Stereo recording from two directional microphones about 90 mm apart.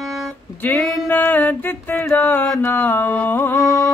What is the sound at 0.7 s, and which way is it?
Music, 20° left (ahead or behind).